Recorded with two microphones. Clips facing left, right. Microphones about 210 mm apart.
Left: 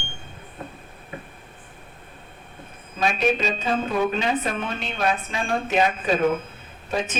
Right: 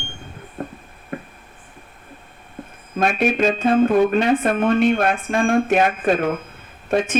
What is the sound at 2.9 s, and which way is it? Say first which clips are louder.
Speech: right 3 dB; 55° right (ahead or behind).